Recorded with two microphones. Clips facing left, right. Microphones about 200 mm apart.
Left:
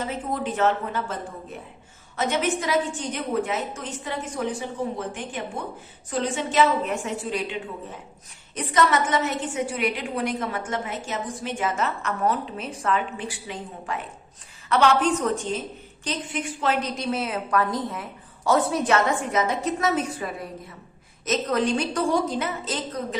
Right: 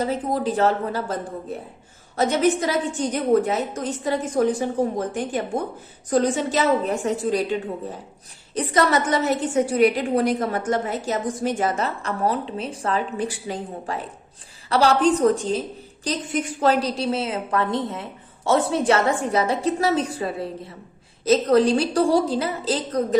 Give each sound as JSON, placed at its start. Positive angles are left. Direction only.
{"t": 0.0, "sound": "a woman's voice", "side_deg": -40}